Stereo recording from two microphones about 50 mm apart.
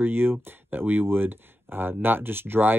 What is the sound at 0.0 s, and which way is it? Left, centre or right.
Speech, right.